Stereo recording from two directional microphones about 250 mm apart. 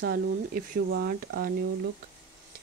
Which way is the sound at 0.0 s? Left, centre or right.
Right.